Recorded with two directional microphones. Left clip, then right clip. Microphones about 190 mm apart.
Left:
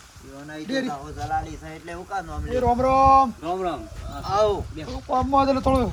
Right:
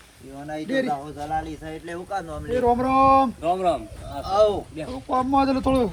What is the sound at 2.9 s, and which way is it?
Speech, 60° left (ahead or behind).